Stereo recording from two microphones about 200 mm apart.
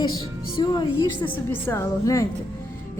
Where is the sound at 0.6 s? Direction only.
20° left (ahead or behind).